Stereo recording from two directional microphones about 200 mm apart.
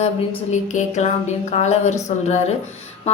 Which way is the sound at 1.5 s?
35° left (ahead or behind).